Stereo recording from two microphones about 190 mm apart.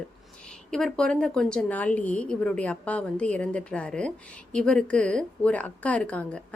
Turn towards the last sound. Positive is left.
turn(degrees=5)  # may be behind; listen again after turning